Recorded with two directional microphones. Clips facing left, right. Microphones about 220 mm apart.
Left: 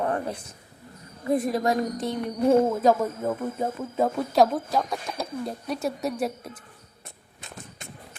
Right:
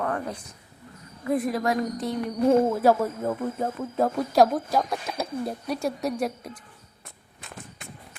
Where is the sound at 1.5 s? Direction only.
25° left (ahead or behind).